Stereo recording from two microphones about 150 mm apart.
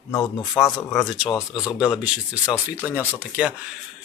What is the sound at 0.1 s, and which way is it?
Speech, 20° left (ahead or behind).